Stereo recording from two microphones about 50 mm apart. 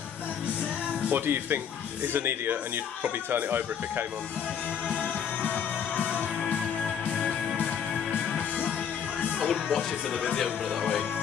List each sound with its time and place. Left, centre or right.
1.1 s speech: right
5.4 s music: left
9.5 s speech: centre